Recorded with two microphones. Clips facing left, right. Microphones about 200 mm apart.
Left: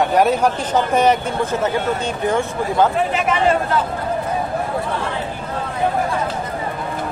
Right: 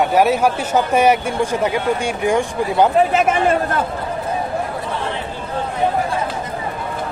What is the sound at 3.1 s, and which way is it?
Speech, 50° right (ahead or behind).